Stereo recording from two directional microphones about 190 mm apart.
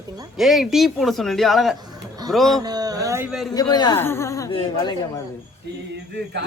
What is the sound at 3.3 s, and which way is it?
Speech, centre (ahead or behind).